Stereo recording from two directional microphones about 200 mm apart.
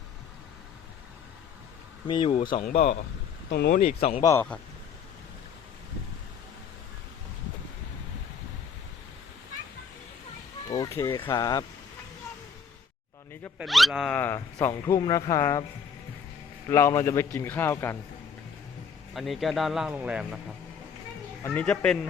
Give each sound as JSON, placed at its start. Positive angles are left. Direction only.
{"t": 2.0, "sound": "speech", "side_deg": 25}
{"t": 2.6, "sound": "speech", "side_deg": 45}
{"t": 3.5, "sound": "speech", "side_deg": 55}
{"t": 3.8, "sound": "speech", "side_deg": 30}
{"t": 4.2, "sound": "a man's voice", "side_deg": 15}
{"t": 10.7, "sound": "speech", "side_deg": 15}
{"t": 13.6, "sound": "a man's voice", "side_deg": 0}
{"t": 16.6, "sound": "a man's voice", "side_deg": 15}
{"t": 19.1, "sound": "speech", "side_deg": 0}
{"t": 21.4, "sound": "a man's voice", "side_deg": 5}